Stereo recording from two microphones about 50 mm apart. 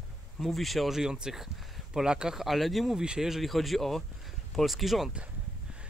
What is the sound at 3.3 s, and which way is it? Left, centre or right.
Speech, centre.